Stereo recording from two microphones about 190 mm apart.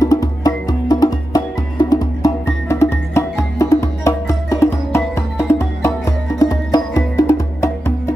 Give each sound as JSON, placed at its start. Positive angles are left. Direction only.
{"t": 0.0, "sound": "music", "side_deg": 20}